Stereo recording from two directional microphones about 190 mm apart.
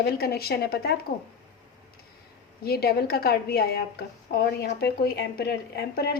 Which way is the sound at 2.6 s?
55° left (ahead or behind).